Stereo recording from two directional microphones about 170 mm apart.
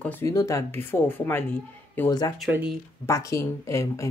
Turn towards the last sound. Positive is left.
turn(degrees=15)  # may be behind; listen again after turning